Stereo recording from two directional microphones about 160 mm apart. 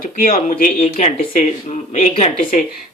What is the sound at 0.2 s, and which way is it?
Speech, 60° left (ahead or behind).